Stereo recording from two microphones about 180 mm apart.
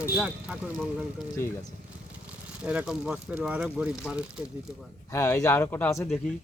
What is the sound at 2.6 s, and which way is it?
Speech, 5° right (ahead or behind).